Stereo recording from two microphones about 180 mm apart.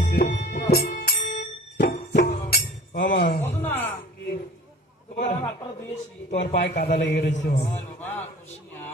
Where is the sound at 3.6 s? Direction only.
10° left (ahead or behind).